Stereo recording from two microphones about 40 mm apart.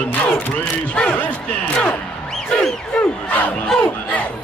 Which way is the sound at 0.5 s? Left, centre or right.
Left.